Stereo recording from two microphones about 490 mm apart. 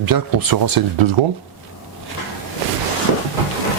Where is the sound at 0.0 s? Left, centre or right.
Right.